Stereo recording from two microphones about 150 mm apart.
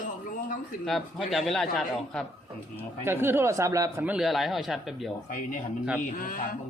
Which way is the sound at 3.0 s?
15° right (ahead or behind).